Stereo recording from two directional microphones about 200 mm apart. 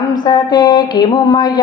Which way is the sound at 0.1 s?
20° left (ahead or behind).